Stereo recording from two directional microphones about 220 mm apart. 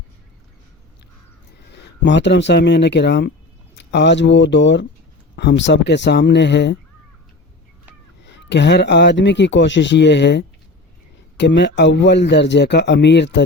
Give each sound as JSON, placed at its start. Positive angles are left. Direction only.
{"t": 1.5, "sound": "speech", "side_deg": 50}
{"t": 8.2, "sound": "speech", "side_deg": 55}